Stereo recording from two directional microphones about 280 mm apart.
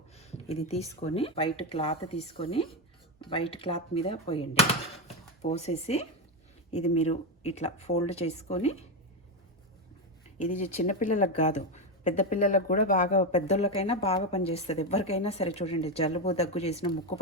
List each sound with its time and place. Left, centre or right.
0.2 s a sound: left
1.0 s speech: left
10.3 s speech: left